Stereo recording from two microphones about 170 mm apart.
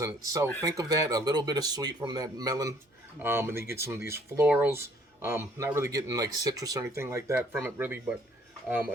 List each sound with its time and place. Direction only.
0.6 s speech: 20° right (ahead or behind)